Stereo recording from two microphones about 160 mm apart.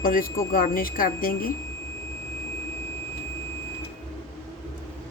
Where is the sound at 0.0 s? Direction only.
60° left (ahead or behind).